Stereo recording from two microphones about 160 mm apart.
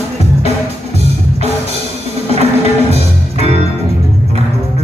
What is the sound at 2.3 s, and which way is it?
Music, 40° right (ahead or behind).